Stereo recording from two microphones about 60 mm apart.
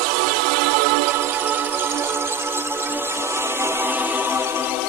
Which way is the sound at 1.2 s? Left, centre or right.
Right.